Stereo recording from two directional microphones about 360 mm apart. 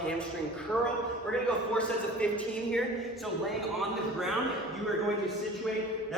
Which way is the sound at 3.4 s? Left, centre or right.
Centre.